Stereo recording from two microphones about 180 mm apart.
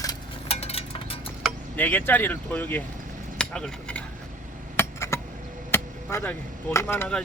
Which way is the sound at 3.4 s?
5° left (ahead or behind).